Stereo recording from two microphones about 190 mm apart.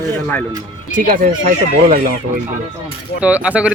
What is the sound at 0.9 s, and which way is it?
Speech, 45° right (ahead or behind).